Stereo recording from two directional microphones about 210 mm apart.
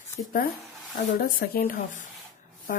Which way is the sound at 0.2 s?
35° left (ahead or behind).